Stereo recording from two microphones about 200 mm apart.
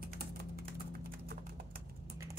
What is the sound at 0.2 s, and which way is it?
Typing, 50° right (ahead or behind).